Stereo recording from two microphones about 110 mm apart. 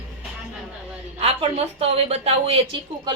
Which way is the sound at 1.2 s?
65° right (ahead or behind).